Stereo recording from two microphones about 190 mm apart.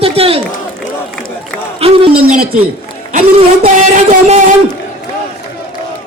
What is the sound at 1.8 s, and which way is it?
Speech, 30° right (ahead or behind).